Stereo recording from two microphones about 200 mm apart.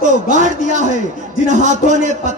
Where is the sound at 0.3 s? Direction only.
40° right (ahead or behind).